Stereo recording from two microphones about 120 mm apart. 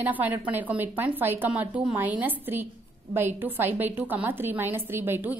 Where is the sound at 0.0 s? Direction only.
15° right (ahead or behind).